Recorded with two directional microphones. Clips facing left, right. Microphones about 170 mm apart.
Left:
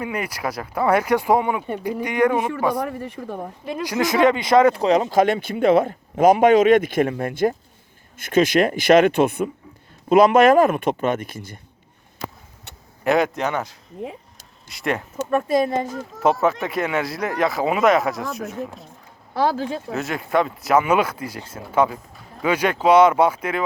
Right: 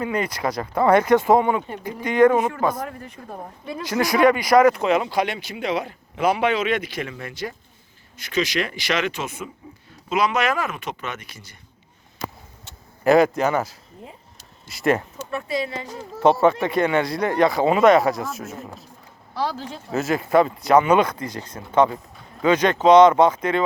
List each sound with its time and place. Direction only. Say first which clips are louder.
0.0 s speech: right 2 dB; 10° left (ahead or behind)
3.8 s speech: even; 15° left (ahead or behind); by 11.6 s 50° left (ahead or behind)
13.1 s speech: right 3 dB; centre (ahead or behind)
15.3 s speech: left 7 dB; 50° left (ahead or behind)
16.4 s speech: right 3 dB; centre (ahead or behind)
19.3 s speech: left 6 dB; 55° left (ahead or behind)
19.9 s speech: right 6 dB; centre (ahead or behind)